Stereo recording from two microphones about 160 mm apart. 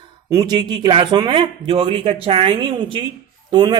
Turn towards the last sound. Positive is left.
turn(degrees=-30)  # may be behind; listen again after turning